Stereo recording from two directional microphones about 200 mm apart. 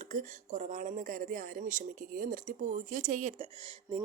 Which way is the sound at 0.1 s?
40° right (ahead or behind).